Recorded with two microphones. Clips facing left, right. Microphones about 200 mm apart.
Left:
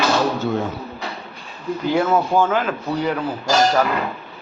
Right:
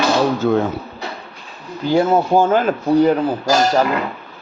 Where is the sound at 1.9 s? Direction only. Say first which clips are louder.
Right 4 dB; 30° right (ahead or behind).